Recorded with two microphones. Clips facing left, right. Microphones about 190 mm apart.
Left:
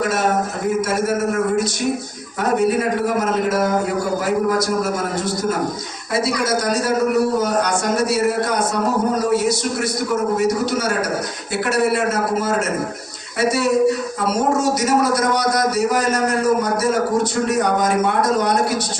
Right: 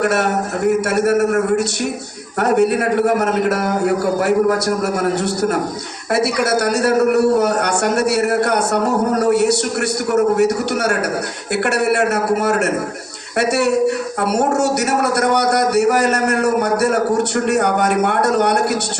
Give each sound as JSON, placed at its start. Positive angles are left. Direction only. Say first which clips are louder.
{"t": 0.0, "sound": "a man's voice", "louder": "right 2 dB", "side_deg": -65}